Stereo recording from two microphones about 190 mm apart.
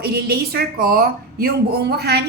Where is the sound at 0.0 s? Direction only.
55° right (ahead or behind).